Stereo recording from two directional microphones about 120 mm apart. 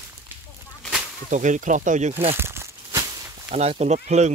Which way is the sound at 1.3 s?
90° right.